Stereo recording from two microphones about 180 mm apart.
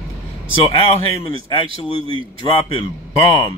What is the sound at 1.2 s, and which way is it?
Speech, 30° left (ahead or behind).